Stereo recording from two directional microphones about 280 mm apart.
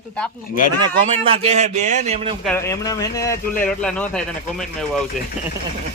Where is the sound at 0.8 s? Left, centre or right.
Centre.